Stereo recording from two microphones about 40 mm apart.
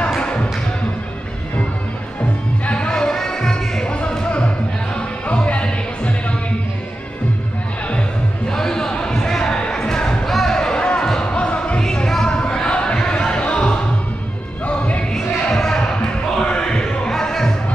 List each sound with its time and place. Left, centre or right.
0.1 s music: centre
2.6 s music: left
2.9 s music: centre
3.8 s music: left
5.2 s music: left
8.5 s a sound: centre
10.2 s music: centre
10.6 s music: left
11.8 s a sound: centre
14.7 s music: left
15.4 s a sound: centre
17.1 s music: centre